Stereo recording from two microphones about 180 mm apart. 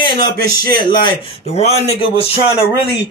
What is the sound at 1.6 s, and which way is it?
Speech, 35° left (ahead or behind).